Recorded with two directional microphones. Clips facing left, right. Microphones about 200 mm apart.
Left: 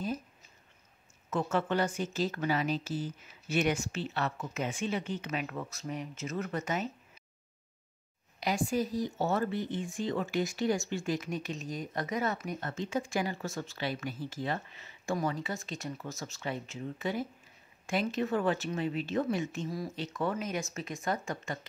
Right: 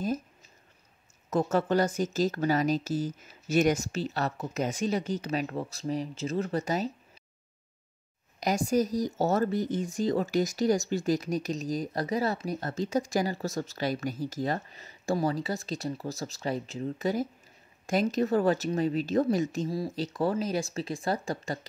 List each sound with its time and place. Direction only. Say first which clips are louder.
1.3 s speech: right 5 dB; 40° right (ahead or behind)
8.4 s speech: right 5 dB; 40° right (ahead or behind)